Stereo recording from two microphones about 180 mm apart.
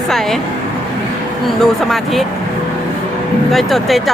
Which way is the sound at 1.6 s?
Centre (ahead or behind).